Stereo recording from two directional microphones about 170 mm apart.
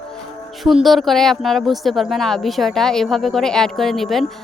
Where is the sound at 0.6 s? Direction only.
Centre (ahead or behind).